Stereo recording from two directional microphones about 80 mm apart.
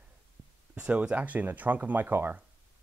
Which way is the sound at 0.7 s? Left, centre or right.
Centre.